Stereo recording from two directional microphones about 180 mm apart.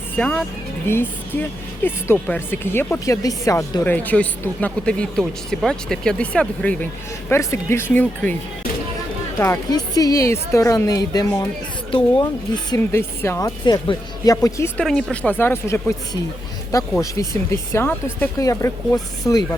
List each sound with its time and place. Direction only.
0.2 s speech: 5° left (ahead or behind)
9.4 s speech: 20° left (ahead or behind)
12.7 s speech: 15° left (ahead or behind)
14.8 s speech: 5° left (ahead or behind)
17.0 s speech: 15° left (ahead or behind)